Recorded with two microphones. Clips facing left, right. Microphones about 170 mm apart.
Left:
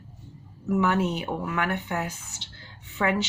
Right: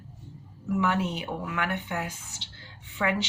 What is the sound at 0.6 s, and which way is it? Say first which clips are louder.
Speech: left 3 dB; 40° left (ahead or behind).